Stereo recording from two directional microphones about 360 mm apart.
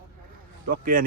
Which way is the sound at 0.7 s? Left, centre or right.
Right.